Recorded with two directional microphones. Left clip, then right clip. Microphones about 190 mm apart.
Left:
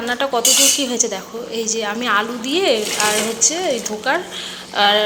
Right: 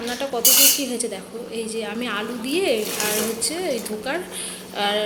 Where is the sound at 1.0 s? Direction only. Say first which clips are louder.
Left 8 dB; 30° right (ahead or behind).